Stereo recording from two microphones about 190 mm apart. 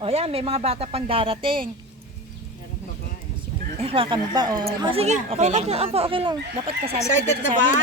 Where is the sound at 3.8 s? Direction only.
30° right (ahead or behind).